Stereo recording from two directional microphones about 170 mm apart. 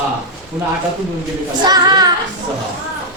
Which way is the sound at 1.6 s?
25° right (ahead or behind).